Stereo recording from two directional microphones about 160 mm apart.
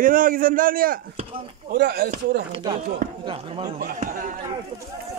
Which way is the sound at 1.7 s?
80° right.